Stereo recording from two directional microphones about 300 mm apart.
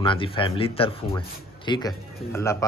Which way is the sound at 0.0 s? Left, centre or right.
Centre.